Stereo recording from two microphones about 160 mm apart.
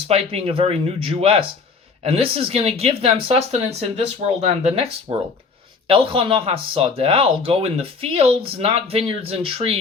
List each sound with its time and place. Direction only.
0.1 s speech: 40° right (ahead or behind)